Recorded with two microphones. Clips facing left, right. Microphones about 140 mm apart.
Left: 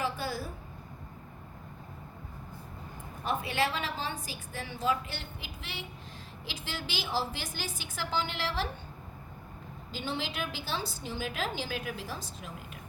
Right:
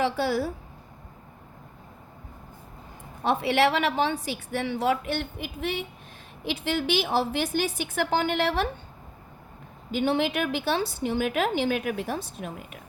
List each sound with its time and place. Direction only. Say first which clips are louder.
0.0 s a woman's voice: right 9 dB; 80° right
3.2 s a woman's voice: right 8 dB; 80° right; by 8.7 s 60° right (ahead or behind)
9.9 s a woman's voice: right 12 dB; 60° right (ahead or behind)